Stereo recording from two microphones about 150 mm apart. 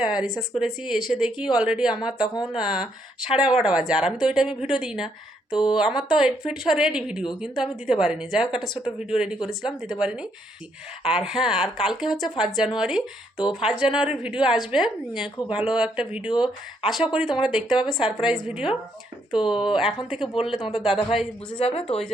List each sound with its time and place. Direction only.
0.1 s speech: 5° right (ahead or behind)
20.7 s a man's voice: 35° left (ahead or behind)